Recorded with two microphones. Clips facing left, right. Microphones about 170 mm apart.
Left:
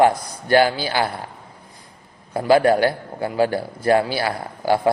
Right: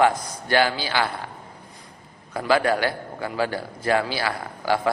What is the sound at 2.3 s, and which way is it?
A man's voice, 35° left (ahead or behind).